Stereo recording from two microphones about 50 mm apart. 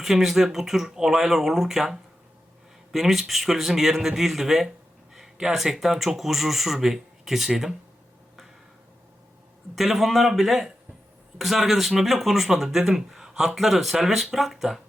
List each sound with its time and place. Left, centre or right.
0.0 s speech: centre
9.7 s speech: centre